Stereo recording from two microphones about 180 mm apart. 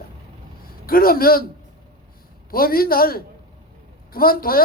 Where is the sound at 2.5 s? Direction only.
55° left (ahead or behind).